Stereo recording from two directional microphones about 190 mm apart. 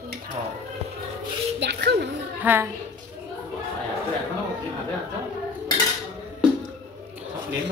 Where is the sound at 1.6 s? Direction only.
65° right (ahead or behind).